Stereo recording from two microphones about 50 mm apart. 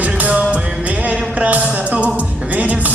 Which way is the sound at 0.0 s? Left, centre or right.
Right.